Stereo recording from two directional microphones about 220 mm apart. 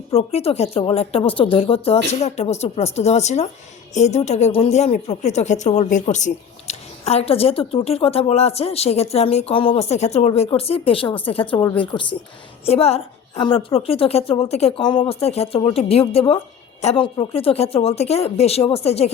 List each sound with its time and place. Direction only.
0.1 s speech: 30° left (ahead or behind)